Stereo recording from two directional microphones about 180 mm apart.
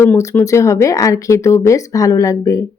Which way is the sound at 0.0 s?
15° left (ahead or behind).